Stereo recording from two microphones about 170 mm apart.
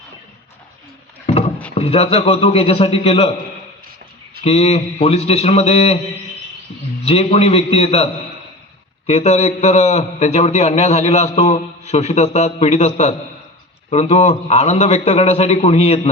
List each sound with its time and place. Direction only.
1.7 s a man's voice: 35° left (ahead or behind)
4.4 s a man's voice: 40° left (ahead or behind)
7.0 s a man's voice: 35° left (ahead or behind)
9.0 s a man's voice: 40° left (ahead or behind)